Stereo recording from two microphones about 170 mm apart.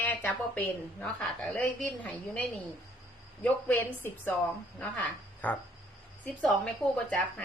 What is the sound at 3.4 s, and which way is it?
Speech, 10° left (ahead or behind).